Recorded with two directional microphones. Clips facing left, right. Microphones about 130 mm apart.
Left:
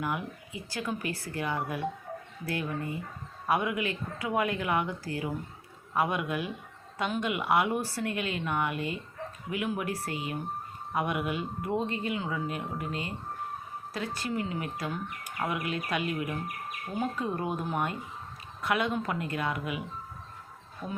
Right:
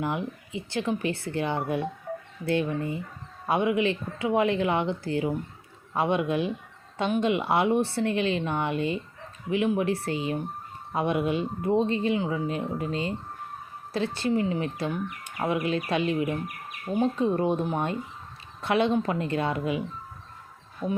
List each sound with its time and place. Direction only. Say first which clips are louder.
0.0 s speech: right 4 dB; 25° right (ahead or behind)